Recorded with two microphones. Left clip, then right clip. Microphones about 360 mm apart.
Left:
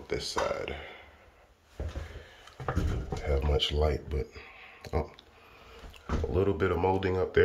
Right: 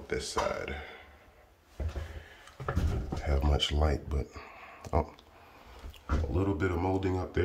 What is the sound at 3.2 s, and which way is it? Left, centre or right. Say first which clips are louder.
Speech: left 2 dB; centre.